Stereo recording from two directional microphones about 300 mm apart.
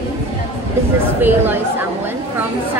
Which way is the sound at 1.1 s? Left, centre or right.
Centre.